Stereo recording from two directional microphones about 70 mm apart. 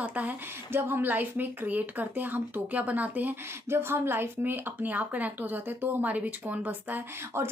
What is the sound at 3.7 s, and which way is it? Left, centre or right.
A woman's voice, right.